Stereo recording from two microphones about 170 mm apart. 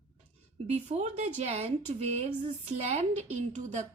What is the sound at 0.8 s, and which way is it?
A woman's voice, 40° right (ahead or behind).